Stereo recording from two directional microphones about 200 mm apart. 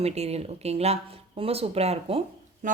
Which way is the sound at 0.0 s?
30° right (ahead or behind).